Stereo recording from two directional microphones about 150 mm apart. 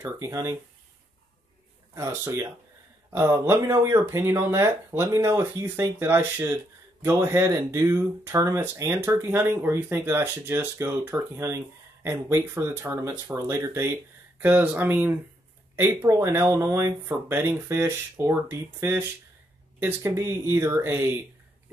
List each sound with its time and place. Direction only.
0.0 s speech: 20° right (ahead or behind)
2.0 s speech: 15° right (ahead or behind)